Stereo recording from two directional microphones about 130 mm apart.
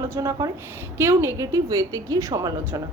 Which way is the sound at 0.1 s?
25° right (ahead or behind).